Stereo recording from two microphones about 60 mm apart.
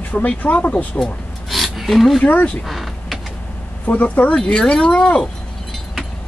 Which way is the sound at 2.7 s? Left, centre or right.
Centre.